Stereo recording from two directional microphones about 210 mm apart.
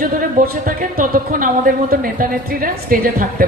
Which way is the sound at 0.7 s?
40° right (ahead or behind).